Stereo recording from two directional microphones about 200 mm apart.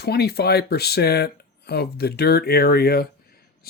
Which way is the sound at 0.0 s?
55° left (ahead or behind).